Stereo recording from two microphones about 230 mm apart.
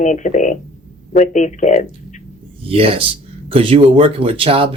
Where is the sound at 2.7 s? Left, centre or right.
Right.